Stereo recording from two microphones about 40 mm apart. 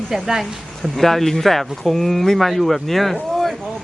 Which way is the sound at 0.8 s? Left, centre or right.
Centre.